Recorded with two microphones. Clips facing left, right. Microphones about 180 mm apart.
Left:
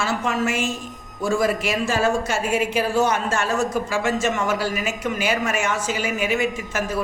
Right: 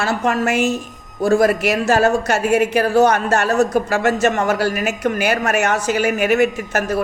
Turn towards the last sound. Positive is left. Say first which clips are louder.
# right 5 dB
turn(degrees=-65)  # may be behind; listen again after turning